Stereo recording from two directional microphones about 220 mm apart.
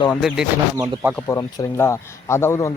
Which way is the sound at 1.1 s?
15° left (ahead or behind).